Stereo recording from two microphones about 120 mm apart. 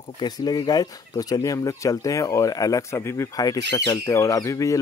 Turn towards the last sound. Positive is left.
turn(degrees=25)  # may be behind; listen again after turning